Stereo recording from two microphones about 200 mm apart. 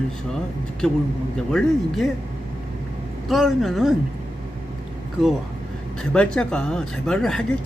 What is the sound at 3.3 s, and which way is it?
Speech, centre (ahead or behind).